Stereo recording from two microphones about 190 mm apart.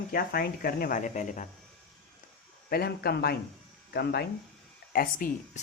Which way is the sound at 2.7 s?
55° left (ahead or behind).